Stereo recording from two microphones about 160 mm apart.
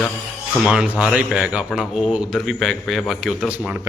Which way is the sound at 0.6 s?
5° right (ahead or behind).